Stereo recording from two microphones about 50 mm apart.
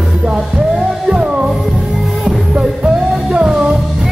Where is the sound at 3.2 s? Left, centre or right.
Centre.